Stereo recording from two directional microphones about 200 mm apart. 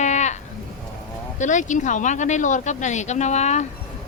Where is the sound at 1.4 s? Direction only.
40° left (ahead or behind).